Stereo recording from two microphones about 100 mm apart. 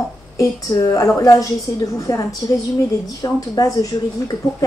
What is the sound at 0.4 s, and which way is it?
Speech, 35° left (ahead or behind).